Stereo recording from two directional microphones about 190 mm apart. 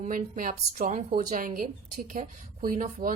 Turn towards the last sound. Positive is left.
turn(degrees=-45)  # may be behind; listen again after turning